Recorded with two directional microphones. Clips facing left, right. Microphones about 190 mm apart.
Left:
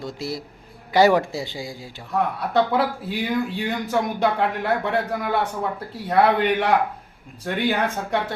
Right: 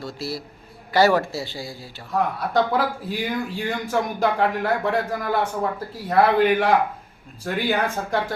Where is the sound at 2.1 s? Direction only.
Centre (ahead or behind).